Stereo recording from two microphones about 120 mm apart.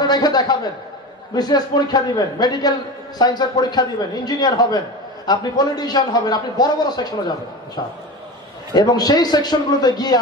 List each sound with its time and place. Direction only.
0.0 s a man's voice: 35° left (ahead or behind)